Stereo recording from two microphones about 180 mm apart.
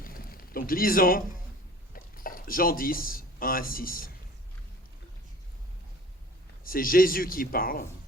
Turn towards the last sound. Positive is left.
turn(degrees=55)  # may be behind; listen again after turning